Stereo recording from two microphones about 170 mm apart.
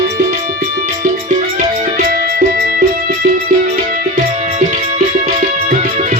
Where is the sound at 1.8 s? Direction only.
50° right (ahead or behind).